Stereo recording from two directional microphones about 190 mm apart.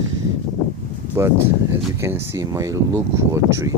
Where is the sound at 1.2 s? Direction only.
15° right (ahead or behind).